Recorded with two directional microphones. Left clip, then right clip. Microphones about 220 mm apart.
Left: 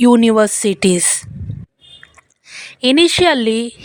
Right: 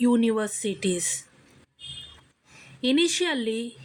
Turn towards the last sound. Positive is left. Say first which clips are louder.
# left 14 dB
turn(degrees=45)  # may be behind; listen again after turning